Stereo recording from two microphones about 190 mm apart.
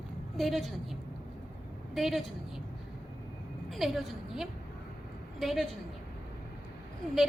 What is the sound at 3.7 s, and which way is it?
A woman's voice, centre (ahead or behind).